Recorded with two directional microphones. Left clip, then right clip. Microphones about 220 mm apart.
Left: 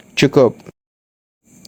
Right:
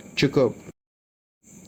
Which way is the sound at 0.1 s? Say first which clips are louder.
Left 9 dB; 45° left (ahead or behind).